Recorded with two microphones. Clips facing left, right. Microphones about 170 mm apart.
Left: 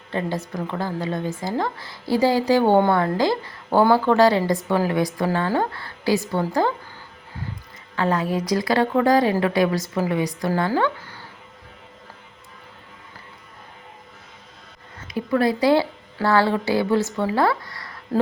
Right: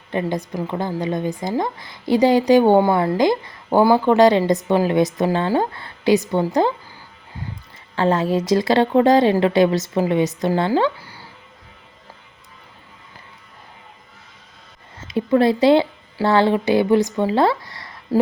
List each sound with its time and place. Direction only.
0.1 s a woman's voice: 15° right (ahead or behind)
7.9 s a woman's voice: 25° right (ahead or behind); by 11.3 s 10° right (ahead or behind)
15.0 s a woman's voice: 25° right (ahead or behind)